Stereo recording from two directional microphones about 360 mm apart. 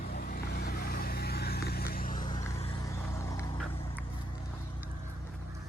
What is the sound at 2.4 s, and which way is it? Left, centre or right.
Vehicle, centre.